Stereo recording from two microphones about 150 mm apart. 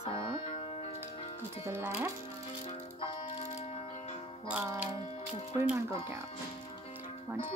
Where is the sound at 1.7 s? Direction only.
15° right (ahead or behind).